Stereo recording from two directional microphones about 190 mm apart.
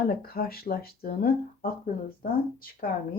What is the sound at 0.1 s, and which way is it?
Speech, 55° left (ahead or behind).